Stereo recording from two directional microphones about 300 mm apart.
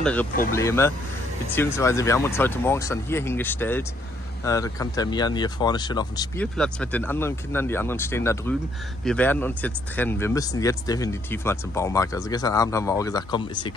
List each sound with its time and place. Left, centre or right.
0.0 s speech: centre
0.3 s speech: left
0.6 s speech: centre